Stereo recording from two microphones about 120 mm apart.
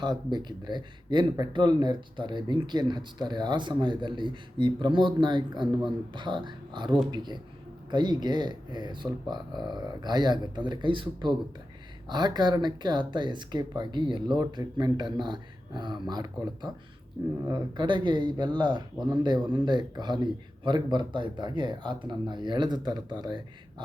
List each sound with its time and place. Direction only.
0.0 s speech: 35° right (ahead or behind)